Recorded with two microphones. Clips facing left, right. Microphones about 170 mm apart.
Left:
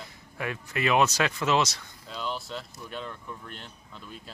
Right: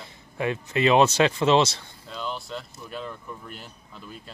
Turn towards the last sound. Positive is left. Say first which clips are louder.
# right 2 dB
turn(degrees=0)  # may be behind; listen again after turning